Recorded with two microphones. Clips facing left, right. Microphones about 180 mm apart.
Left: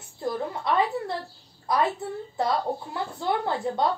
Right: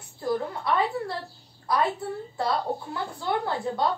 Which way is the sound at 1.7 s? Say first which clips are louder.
Left 1 dB; 20° left (ahead or behind).